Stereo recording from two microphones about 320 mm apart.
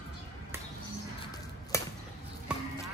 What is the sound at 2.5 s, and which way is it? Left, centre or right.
Music, centre.